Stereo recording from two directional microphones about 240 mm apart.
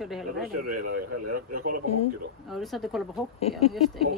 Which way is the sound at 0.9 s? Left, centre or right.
Right.